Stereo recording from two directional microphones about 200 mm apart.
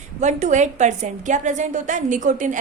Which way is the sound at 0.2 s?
35° right (ahead or behind).